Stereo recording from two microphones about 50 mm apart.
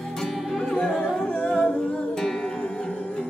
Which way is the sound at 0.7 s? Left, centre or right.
Centre.